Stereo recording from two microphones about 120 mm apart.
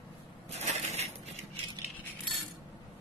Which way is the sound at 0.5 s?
70° right (ahead or behind).